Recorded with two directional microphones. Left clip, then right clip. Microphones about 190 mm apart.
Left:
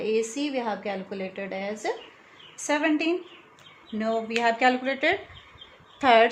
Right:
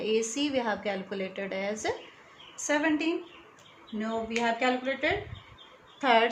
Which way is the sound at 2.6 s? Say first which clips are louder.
Left 3 dB; 35° left (ahead or behind).